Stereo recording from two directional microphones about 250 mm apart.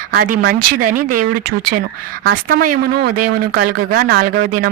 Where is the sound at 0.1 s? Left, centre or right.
Right.